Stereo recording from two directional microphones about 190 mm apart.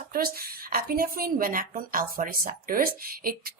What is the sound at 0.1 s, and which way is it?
A woman's voice, 50° right (ahead or behind).